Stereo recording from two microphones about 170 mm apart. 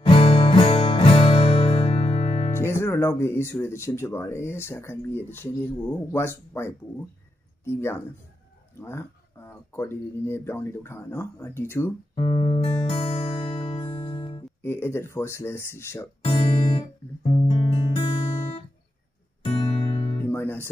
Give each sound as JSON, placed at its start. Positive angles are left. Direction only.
{"t": 0.0, "sound": "music", "side_deg": 30}
{"t": 2.5, "sound": "speech", "side_deg": 15}
{"t": 12.2, "sound": "music", "side_deg": 25}
{"t": 14.6, "sound": "speech", "side_deg": 15}
{"t": 16.3, "sound": "music", "side_deg": 30}
{"t": 19.4, "sound": "music", "side_deg": 35}
{"t": 20.2, "sound": "guitar", "side_deg": 10}